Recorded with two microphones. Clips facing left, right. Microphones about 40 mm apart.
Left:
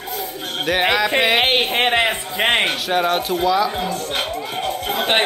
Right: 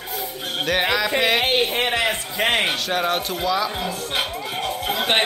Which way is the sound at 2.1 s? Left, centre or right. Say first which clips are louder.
Left 2 dB; centre.